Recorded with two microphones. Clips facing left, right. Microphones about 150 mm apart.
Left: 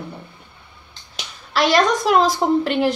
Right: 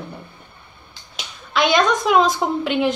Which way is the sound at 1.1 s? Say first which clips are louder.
Even; centre (ahead or behind).